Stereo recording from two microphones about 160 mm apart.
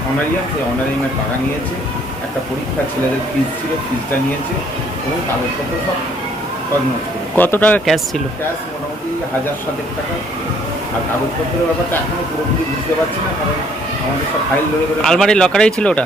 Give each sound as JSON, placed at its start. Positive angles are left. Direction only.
{"t": 7.3, "sound": "speech", "side_deg": 10}
{"t": 15.0, "sound": "speech", "side_deg": 5}